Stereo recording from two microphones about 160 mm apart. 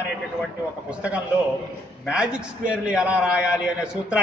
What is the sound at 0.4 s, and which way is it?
A man's voice, 5° right (ahead or behind).